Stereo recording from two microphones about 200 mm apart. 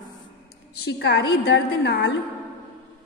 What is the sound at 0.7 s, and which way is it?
A woman's voice, 55° left (ahead or behind).